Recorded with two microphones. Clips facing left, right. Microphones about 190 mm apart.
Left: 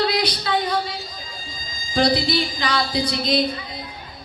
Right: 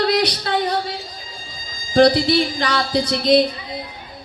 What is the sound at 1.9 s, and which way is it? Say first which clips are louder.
A woman's voice: right 6 dB; 65° right (ahead or behind).